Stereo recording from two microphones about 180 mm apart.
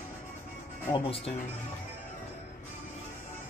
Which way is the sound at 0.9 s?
30° left (ahead or behind).